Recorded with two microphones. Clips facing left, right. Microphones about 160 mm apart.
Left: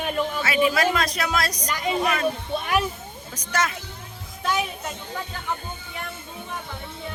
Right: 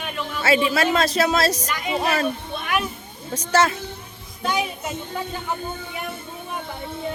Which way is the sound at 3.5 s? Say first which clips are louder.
Right 7 dB; 30° right (ahead or behind).